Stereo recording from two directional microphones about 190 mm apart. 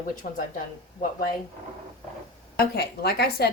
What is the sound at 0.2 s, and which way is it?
Speech, 45° left (ahead or behind).